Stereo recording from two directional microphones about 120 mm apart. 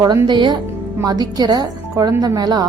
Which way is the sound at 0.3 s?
40° right (ahead or behind).